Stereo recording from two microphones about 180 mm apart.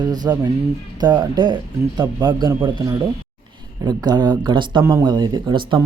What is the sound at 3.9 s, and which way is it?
Speech, 25° right (ahead or behind).